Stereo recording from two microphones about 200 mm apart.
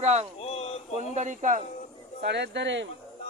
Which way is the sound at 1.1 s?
40° right (ahead or behind).